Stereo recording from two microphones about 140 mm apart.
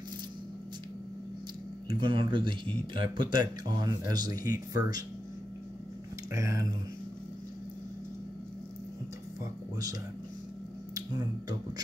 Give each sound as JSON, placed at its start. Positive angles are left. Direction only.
{"t": 1.9, "sound": "speech", "side_deg": -35}
{"t": 6.3, "sound": "speech", "side_deg": -25}
{"t": 9.4, "sound": "speech", "side_deg": -25}
{"t": 11.0, "sound": "speech", "side_deg": -30}